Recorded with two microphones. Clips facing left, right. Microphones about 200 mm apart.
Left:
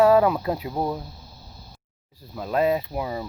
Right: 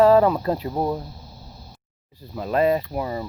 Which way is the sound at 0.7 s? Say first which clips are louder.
Right 2 dB; 10° right (ahead or behind).